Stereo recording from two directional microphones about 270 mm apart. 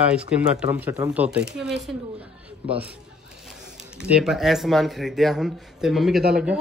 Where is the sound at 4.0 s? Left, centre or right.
Centre.